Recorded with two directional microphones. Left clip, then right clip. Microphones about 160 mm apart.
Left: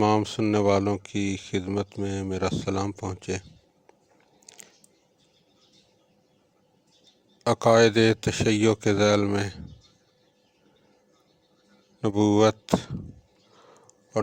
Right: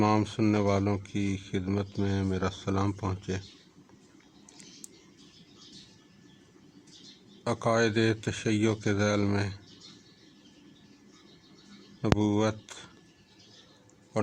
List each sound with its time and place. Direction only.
0.0 s a sound: 50° left (ahead or behind)
0.5 s speech: 45° left (ahead or behind)
7.4 s speech: 50° left (ahead or behind)
12.2 s speech: 50° left (ahead or behind)